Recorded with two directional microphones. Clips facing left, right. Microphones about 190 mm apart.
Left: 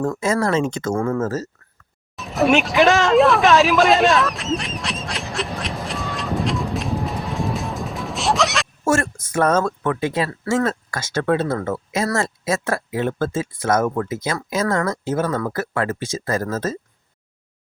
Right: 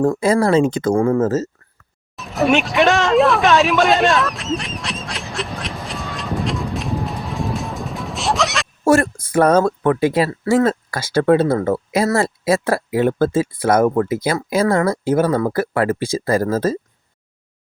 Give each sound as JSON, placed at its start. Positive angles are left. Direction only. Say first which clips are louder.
{"t": 0.0, "sound": "speech", "louder": "right 5 dB", "side_deg": -30}
{"t": 2.1, "sound": "a sound", "louder": "even", "side_deg": 0}
{"t": 8.8, "sound": "speech", "louder": "right 6 dB", "side_deg": -35}